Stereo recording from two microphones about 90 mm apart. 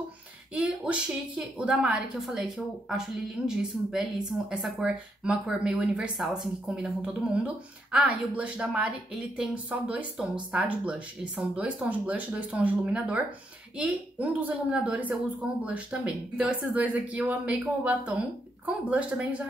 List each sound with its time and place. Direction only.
0.6 s speech: 10° right (ahead or behind)